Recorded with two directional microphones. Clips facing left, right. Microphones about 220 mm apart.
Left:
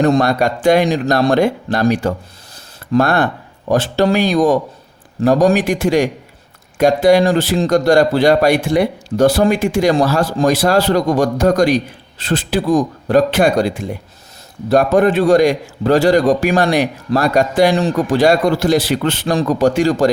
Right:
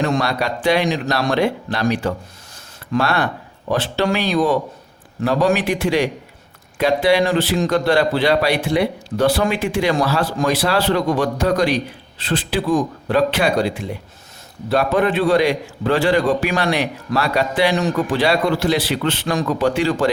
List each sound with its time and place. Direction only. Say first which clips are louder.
0.0 s a man's voice: left 6 dB; 45° left (ahead or behind)